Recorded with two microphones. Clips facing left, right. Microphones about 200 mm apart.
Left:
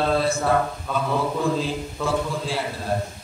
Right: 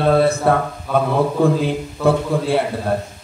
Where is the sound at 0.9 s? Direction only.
5° right (ahead or behind).